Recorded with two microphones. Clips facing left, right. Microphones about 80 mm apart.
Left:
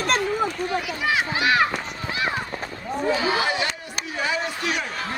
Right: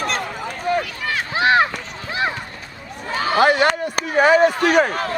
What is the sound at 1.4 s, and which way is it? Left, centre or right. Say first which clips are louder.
Run: right 7 dB; right.